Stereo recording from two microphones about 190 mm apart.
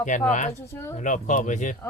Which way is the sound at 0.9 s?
40° left (ahead or behind).